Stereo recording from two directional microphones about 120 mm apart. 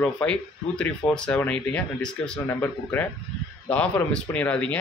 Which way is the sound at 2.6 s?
15° left (ahead or behind).